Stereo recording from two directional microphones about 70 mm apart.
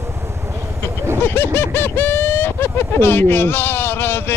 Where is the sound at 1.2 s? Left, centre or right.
Left.